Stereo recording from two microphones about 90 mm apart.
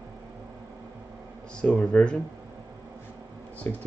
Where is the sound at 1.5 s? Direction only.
10° left (ahead or behind).